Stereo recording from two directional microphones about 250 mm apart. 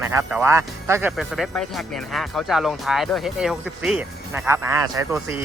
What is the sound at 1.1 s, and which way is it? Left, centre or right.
Speech, centre.